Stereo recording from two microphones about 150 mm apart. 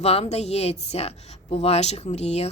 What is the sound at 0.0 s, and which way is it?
A woman's voice, 45° left (ahead or behind).